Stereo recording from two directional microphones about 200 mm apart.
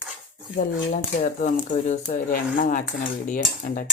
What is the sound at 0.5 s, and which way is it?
Speech, 40° left (ahead or behind).